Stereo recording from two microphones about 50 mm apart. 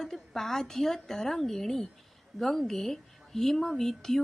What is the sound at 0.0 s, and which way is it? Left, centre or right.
A woman's voice, centre.